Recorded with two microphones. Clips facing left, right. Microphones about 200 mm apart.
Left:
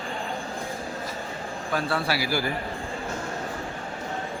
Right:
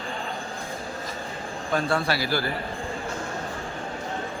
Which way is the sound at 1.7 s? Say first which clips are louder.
Right 2 dB; 5° left (ahead or behind).